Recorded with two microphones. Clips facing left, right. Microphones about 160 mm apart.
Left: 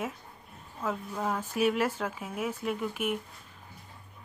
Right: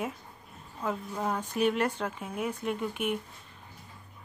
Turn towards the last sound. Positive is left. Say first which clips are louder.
# even
turn(degrees=0)  # may be behind; listen again after turning